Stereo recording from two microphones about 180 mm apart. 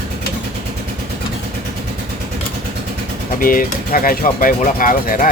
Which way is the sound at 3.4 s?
50° left (ahead or behind).